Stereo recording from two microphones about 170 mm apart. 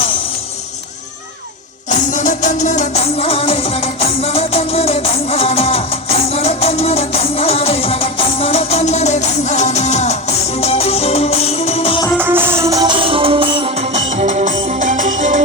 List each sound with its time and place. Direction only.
1.9 s music: 45° left (ahead or behind)
12.2 s music: 10° right (ahead or behind); by 15.4 s 45° right (ahead or behind)